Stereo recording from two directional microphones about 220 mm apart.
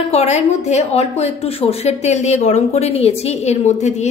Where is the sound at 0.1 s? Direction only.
30° left (ahead or behind).